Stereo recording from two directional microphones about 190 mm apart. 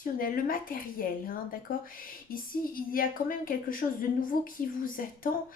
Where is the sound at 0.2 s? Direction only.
50° left (ahead or behind).